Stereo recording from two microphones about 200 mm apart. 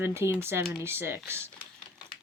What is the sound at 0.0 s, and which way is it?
Speech, 10° right (ahead or behind).